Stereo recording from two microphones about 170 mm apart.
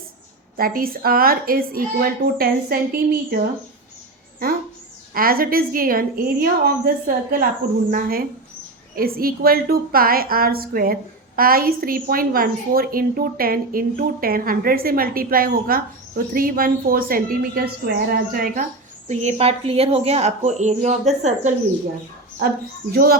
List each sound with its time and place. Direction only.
0.5 s a woman's voice: 60° right (ahead or behind)
5.1 s a woman's voice: 60° right (ahead or behind)
19.0 s a woman's voice: 40° right (ahead or behind)